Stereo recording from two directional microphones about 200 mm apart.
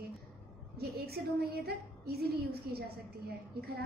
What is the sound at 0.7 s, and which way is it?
A woman's voice, 50° right (ahead or behind).